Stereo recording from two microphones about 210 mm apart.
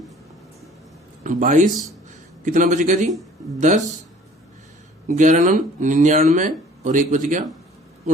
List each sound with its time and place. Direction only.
1.2 s speech: 40° right (ahead or behind)
5.0 s speech: 35° right (ahead or behind)